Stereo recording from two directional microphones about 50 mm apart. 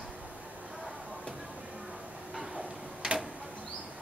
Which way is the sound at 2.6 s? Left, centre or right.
Centre.